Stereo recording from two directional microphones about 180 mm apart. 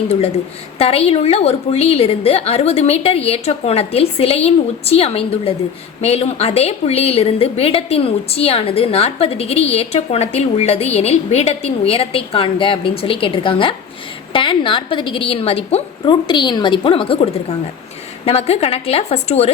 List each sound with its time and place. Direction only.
0.8 s a woman's voice: 35° left (ahead or behind)